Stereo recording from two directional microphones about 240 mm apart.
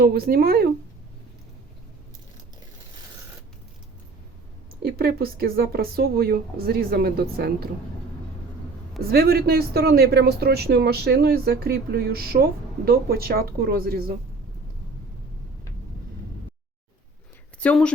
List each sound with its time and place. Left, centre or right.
0.0 s speech: right
4.7 s speech: right
9.0 s speech: right
17.6 s a woman's voice: centre